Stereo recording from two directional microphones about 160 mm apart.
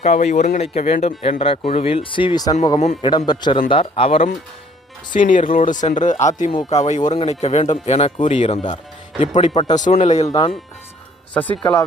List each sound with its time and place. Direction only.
0.0 s speech: 45° left (ahead or behind); by 2.6 s 25° left (ahead or behind)
2.7 s speech: 45° left (ahead or behind)
3.0 s a man's voice: 25° left (ahead or behind)
5.1 s speech: 55° left (ahead or behind); by 8.8 s 35° left (ahead or behind)
9.2 s speech: 45° left (ahead or behind)
10.2 s speech: 30° left (ahead or behind)
11.6 s a man's voice: 20° left (ahead or behind)